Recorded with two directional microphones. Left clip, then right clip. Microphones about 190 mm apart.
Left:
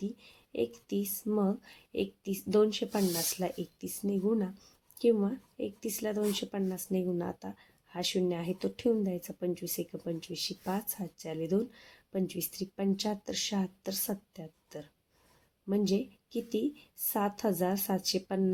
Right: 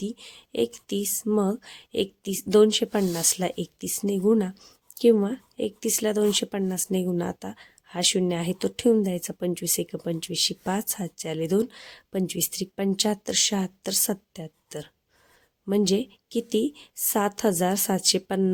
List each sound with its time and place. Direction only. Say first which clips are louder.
0.0 s speech: right 7 dB; 45° right (ahead or behind)